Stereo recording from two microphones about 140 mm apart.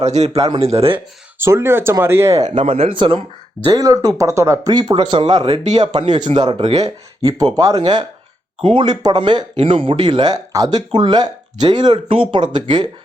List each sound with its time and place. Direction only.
0.0 s speech: 50° right (ahead or behind)
0.3 s speech: 30° right (ahead or behind)
0.6 s speech: 45° right (ahead or behind)
0.9 s speech: 20° right (ahead or behind)
2.6 s speech: 45° right (ahead or behind)
3.8 s speech: 25° right (ahead or behind)
5.4 s speech: 50° right (ahead or behind)
5.7 s speech: 30° right (ahead or behind)